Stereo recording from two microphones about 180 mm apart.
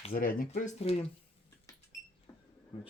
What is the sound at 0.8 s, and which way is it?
Speech, 35° left (ahead or behind).